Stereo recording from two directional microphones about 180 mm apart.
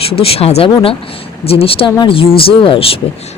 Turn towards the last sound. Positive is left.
turn(degrees=30)  # may be behind; listen again after turning